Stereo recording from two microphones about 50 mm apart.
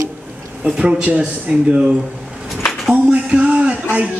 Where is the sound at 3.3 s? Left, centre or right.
Right.